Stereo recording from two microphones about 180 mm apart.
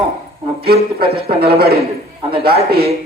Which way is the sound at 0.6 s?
60° right (ahead or behind).